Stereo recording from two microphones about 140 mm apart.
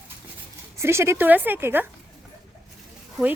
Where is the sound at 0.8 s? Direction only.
20° right (ahead or behind).